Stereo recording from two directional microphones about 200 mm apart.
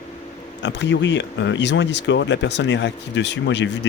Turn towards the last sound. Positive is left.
turn(degrees=60)  # may be behind; listen again after turning